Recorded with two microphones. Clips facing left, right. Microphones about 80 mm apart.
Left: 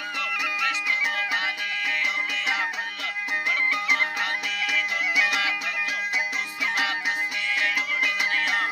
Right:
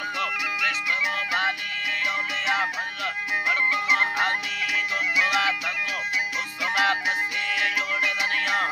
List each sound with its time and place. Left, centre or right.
2.3 s music: right
4.7 s music: right
6.6 s music: right